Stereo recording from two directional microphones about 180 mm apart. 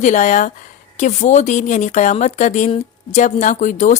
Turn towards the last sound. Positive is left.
turn(degrees=45)  # may be behind; listen again after turning